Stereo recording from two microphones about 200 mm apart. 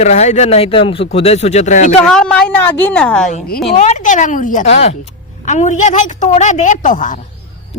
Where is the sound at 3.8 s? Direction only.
35° left (ahead or behind).